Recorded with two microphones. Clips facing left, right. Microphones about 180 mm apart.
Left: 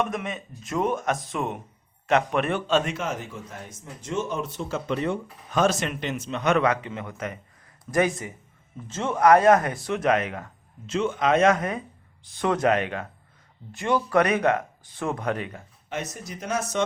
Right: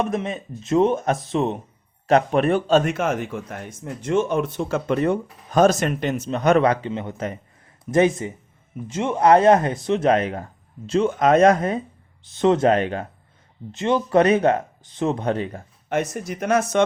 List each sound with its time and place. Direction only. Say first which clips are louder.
0.0 s a man's voice: right 4 dB; 30° right (ahead or behind)
15.9 s speech: right 9 dB; 55° right (ahead or behind)